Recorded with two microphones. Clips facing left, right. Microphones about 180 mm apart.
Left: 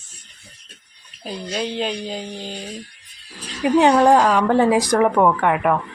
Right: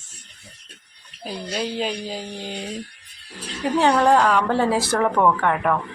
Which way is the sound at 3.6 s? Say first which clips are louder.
Left 4 dB; 15° left (ahead or behind).